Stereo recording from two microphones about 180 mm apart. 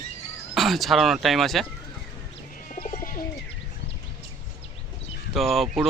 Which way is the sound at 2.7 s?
50° left (ahead or behind).